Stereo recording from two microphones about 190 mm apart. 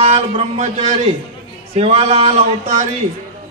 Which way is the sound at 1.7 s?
35° right (ahead or behind).